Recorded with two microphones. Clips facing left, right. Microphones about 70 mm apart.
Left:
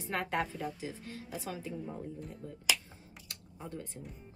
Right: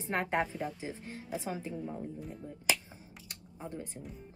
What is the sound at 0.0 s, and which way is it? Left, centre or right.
Speech, right.